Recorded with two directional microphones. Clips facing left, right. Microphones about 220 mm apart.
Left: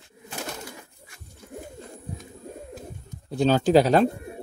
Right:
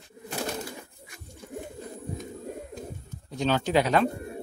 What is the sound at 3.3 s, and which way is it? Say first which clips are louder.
Speech: left 6 dB; 35° left (ahead or behind).